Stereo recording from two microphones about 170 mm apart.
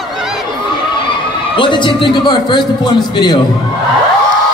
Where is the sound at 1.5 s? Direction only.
30° left (ahead or behind).